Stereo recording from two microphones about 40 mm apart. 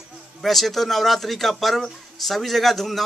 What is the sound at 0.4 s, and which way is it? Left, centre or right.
Speech, centre.